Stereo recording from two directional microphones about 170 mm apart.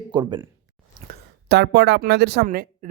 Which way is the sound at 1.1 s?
80° right.